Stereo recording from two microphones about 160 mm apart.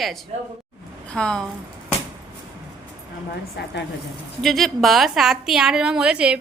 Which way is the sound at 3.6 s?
90° left.